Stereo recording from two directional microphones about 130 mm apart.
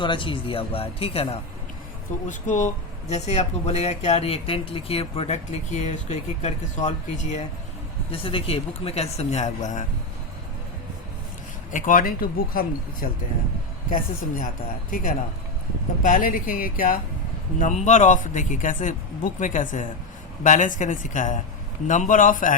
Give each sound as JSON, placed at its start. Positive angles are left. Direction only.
{"t": 0.0, "sound": "speech", "side_deg": 40}
{"t": 2.2, "sound": "speech", "side_deg": 70}
{"t": 8.1, "sound": "speech", "side_deg": 45}
{"t": 11.7, "sound": "speech", "side_deg": 90}
{"t": 17.6, "sound": "a man's voice", "side_deg": 65}